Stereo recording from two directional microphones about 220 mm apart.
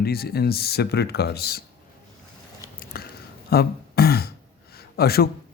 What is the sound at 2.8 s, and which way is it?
Biting, 45° left (ahead or behind).